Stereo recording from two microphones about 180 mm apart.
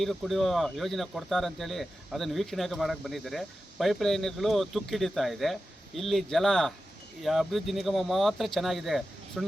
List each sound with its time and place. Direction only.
0.0 s speech: centre (ahead or behind)